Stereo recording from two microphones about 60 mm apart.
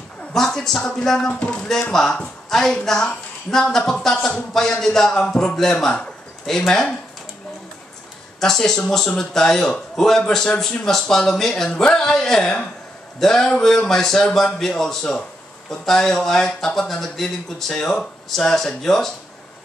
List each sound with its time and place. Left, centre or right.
0.3 s speech: centre
8.4 s speech: centre